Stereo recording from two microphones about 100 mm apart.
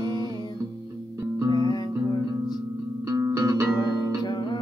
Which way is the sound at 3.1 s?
35° right (ahead or behind).